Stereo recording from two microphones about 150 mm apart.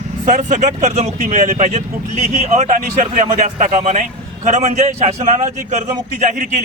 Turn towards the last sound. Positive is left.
turn(degrees=-55)  # may be behind; listen again after turning